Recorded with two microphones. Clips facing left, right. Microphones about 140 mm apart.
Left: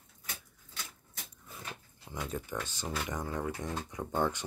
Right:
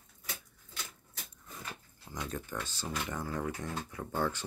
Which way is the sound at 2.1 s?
10° left (ahead or behind).